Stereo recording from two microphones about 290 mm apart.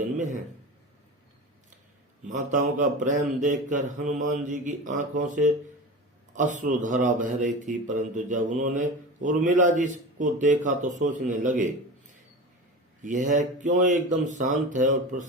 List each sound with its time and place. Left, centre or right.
2.2 s speech: right